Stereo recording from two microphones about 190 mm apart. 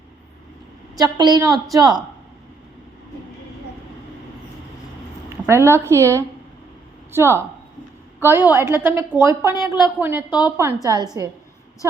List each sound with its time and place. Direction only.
0.9 s a woman's voice: 20° right (ahead or behind)
5.5 s a woman's voice: 15° right (ahead or behind)